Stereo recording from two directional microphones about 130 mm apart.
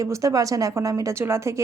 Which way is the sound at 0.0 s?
25° right (ahead or behind).